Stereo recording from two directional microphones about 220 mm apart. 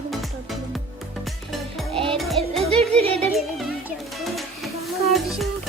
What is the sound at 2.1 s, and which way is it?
Music, centre (ahead or behind).